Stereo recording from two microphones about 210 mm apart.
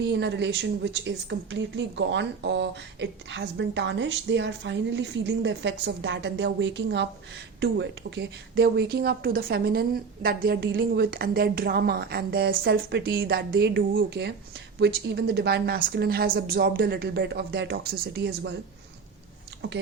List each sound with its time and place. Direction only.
0.0 s speech: 55° right (ahead or behind)
19.6 s speech: 50° right (ahead or behind)